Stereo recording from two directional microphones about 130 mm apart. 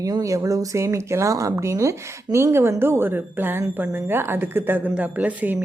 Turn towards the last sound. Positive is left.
turn(degrees=-10)  # may be behind; listen again after turning